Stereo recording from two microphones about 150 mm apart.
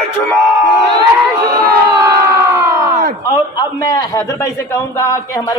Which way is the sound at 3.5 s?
25° left (ahead or behind).